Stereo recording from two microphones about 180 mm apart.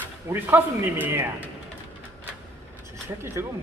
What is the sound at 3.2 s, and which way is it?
Speech, 15° right (ahead or behind).